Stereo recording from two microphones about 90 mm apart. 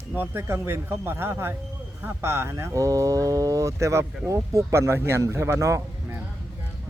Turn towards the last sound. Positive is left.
turn(degrees=-35)  # may be behind; listen again after turning